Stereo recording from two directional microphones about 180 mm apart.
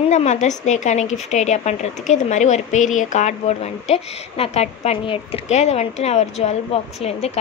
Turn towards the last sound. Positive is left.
turn(degrees=35)  # may be behind; listen again after turning